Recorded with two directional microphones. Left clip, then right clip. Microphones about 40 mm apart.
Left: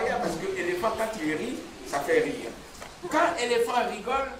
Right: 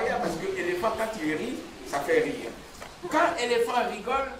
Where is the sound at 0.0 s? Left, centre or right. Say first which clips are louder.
Even; left.